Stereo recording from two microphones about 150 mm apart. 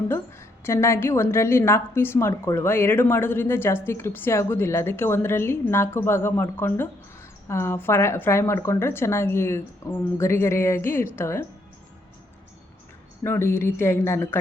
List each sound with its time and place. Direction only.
0.1 s a woman's voice: 15° left (ahead or behind)
13.2 s a woman's voice: 15° left (ahead or behind)